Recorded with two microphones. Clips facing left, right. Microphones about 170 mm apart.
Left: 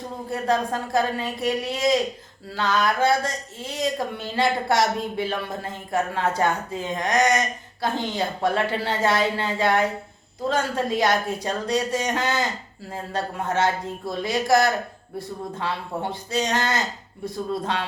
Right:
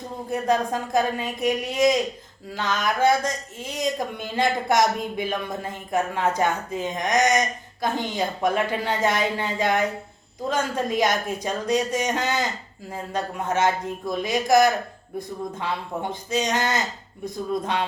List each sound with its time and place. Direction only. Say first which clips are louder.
0.3 s speech: right 1 dB; 20° right (ahead or behind)